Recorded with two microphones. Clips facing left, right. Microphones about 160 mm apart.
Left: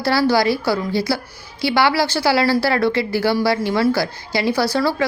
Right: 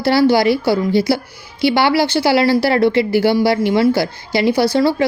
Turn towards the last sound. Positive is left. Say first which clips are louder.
# right 4 dB
turn(degrees=-25)  # may be behind; listen again after turning